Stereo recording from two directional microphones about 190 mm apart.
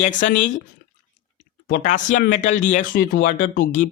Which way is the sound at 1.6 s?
45° left (ahead or behind).